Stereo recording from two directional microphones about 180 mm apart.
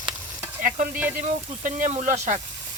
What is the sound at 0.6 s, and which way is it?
Stir, 50° right (ahead or behind).